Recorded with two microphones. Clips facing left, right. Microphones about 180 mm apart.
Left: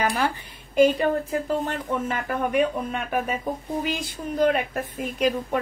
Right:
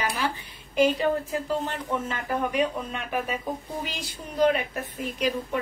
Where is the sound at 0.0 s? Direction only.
50° left (ahead or behind).